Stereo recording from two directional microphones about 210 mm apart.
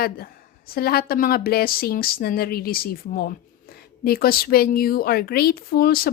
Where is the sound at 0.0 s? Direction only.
45° left (ahead or behind).